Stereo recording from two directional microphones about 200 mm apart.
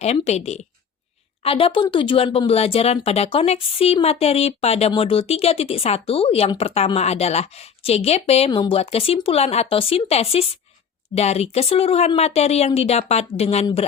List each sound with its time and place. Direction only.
0.0 s speech: 30° left (ahead or behind)